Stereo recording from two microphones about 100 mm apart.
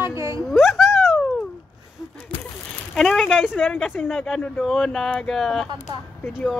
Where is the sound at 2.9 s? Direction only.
5° left (ahead or behind).